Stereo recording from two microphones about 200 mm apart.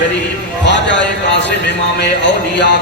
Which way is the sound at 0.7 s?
60° left (ahead or behind).